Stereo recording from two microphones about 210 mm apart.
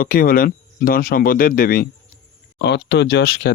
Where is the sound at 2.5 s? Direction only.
55° left (ahead or behind).